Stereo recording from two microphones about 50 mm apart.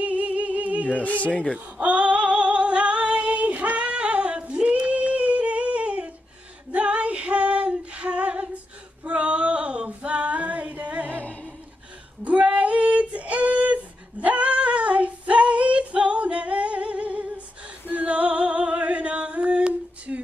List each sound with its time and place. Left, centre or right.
0.0 s music: right
0.8 s speech: left
1.3 s speech: centre
1.8 s female singing: right
17.8 s a sound: right